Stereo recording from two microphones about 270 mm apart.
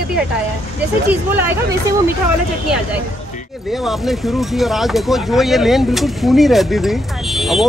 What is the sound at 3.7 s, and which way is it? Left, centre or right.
Speech, centre.